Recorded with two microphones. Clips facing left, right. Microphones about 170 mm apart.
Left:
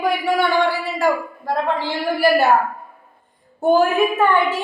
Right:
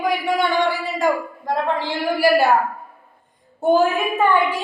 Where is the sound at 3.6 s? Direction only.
20° right (ahead or behind).